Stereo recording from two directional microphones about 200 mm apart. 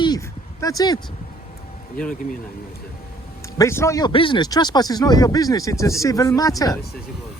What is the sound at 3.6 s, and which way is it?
Speech, 15° left (ahead or behind).